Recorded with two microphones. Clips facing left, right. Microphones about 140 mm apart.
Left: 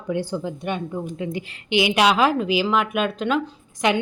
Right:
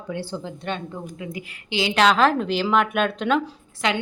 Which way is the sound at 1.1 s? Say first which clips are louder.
Left 5 dB; 30° left (ahead or behind).